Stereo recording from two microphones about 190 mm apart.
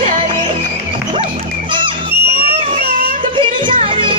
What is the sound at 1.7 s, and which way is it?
Music, 25° right (ahead or behind).